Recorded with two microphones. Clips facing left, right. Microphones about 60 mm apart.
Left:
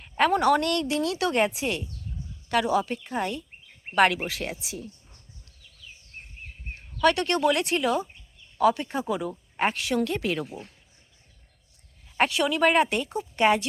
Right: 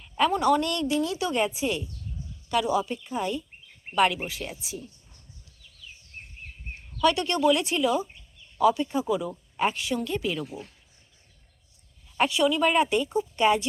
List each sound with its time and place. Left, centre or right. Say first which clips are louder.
0.0 s a woman's voice: left 2 dB; left
7.0 s a woman's voice: left 1 dB; left
12.1 s a woman's voice: right 1 dB; left